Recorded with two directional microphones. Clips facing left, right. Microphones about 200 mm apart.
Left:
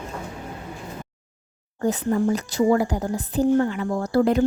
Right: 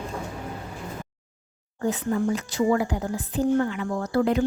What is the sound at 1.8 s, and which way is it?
A woman's voice, 40° left (ahead or behind).